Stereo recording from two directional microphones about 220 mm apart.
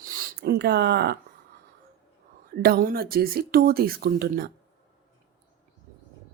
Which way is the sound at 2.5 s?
45° right (ahead or behind).